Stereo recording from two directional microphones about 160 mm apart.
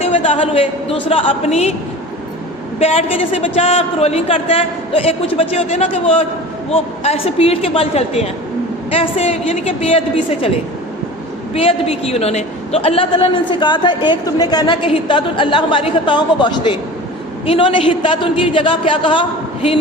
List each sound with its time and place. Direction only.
0.0 s a man's voice: 35° left (ahead or behind)
2.7 s a man's voice: 40° left (ahead or behind)
11.5 s a man's voice: 35° left (ahead or behind)